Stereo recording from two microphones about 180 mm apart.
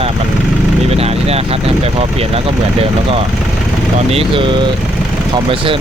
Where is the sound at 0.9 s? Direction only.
35° right (ahead or behind).